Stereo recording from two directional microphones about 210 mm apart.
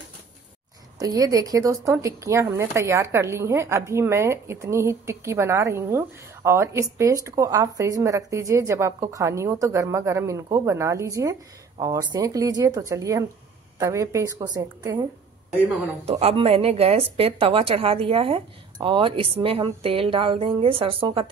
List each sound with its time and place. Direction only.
0.9 s speech: 15° right (ahead or behind)
16.1 s a woman's voice: 30° right (ahead or behind)